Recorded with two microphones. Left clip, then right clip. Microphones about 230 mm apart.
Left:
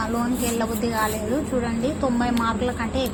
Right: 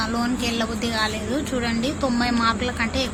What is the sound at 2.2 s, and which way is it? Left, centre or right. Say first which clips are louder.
Speech: right 2 dB; centre.